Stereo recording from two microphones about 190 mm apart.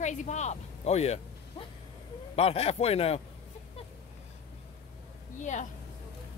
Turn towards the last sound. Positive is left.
turn(degrees=40)  # may be behind; listen again after turning